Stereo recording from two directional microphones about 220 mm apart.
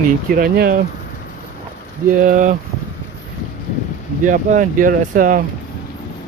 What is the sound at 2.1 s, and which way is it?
Speech, 35° right (ahead or behind).